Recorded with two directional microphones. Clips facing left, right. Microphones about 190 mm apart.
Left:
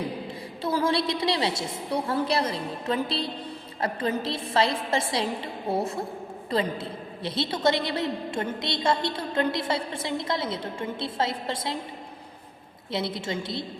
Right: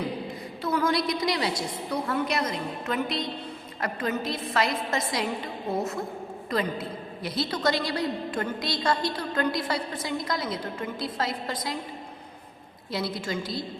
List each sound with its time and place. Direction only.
0.6 s a woman's voice: 30° left (ahead or behind)
12.9 s a woman's voice: 25° left (ahead or behind)